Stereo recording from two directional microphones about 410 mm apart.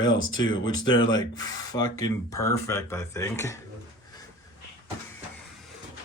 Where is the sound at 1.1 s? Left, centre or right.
Centre.